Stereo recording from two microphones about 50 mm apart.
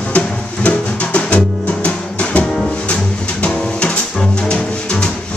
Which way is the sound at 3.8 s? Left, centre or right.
Left.